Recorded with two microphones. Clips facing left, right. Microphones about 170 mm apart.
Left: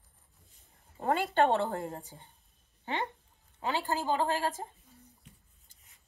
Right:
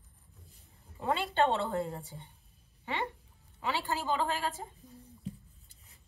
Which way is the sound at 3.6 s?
40° left (ahead or behind).